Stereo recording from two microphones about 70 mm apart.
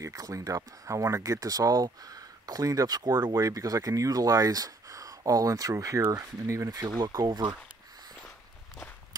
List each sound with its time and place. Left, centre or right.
0.0 s speech: right
3.2 s speech: right
3.4 s speech: right
7.0 s speech: right